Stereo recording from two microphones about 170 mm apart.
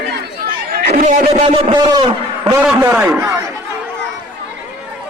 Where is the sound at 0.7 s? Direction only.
55° right (ahead or behind).